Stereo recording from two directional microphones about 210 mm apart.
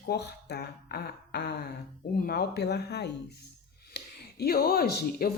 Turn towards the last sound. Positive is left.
turn(degrees=50)  # may be behind; listen again after turning